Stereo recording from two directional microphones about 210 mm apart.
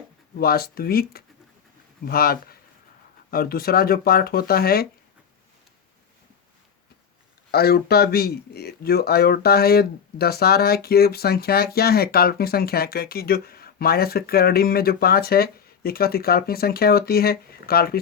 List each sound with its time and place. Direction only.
0.3 s speech: 45° left (ahead or behind)
7.5 s speech: 50° left (ahead or behind)